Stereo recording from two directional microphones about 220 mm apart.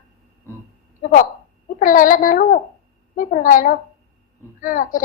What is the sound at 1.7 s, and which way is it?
A woman's voice, 40° left (ahead or behind).